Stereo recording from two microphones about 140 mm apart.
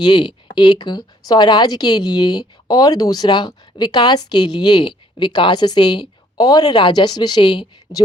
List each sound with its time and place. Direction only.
0.0 s speech: 35° left (ahead or behind)